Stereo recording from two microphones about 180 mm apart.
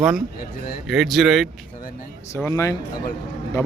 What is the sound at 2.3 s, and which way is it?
Speech, 15° left (ahead or behind).